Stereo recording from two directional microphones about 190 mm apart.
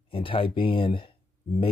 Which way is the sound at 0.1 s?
30° left (ahead or behind).